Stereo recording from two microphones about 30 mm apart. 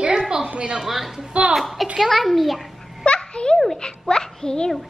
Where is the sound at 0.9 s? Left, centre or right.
Centre.